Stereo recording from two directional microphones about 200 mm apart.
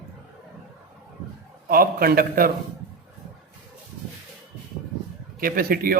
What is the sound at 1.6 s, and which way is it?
Speech, 45° right (ahead or behind).